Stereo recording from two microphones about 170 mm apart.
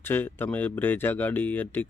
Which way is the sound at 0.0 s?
10° left (ahead or behind).